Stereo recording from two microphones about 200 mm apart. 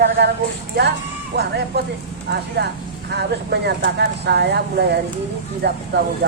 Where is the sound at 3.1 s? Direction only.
55° right (ahead or behind).